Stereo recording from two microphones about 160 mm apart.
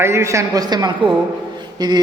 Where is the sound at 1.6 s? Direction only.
25° right (ahead or behind).